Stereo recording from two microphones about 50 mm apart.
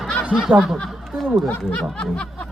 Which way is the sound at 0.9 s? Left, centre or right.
Centre.